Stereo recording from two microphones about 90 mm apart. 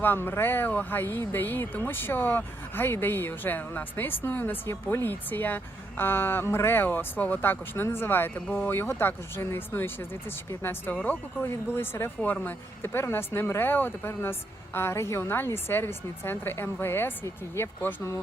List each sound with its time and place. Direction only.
0.0 s a woman's voice: 25° left (ahead or behind)